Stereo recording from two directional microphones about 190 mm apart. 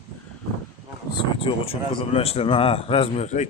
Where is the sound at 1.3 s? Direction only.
30° left (ahead or behind).